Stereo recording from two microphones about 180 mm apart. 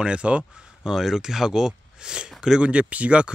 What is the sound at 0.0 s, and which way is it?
Speech, 5° right (ahead or behind).